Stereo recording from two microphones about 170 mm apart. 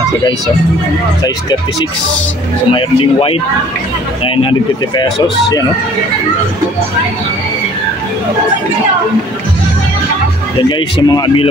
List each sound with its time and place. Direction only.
2.7 s speech: 35° left (ahead or behind)
4.4 s speech: 30° left (ahead or behind)
10.7 s speech: 25° left (ahead or behind)